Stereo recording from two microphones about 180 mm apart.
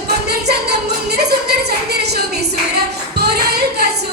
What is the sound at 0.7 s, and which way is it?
Music, 65° right (ahead or behind).